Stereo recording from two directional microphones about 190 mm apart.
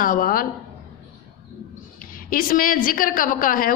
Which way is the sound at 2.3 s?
50° left (ahead or behind).